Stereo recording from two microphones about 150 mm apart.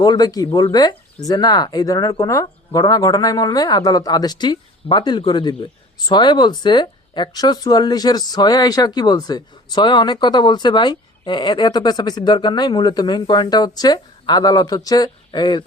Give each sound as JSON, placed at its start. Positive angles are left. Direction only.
{"t": 0.0, "sound": "speech", "side_deg": 25}